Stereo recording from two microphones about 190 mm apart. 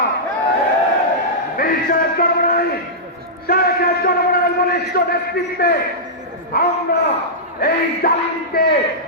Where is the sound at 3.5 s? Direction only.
55° left (ahead or behind).